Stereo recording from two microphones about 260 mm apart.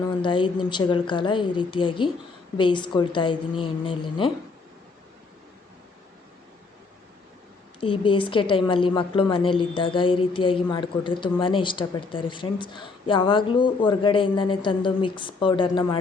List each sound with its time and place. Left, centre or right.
0.2 s speech: centre
7.8 s a woman's voice: centre